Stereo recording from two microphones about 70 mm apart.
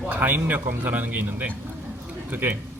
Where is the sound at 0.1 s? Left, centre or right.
Right.